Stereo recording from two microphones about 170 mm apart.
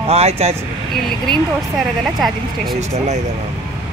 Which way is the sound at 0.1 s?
35° right (ahead or behind).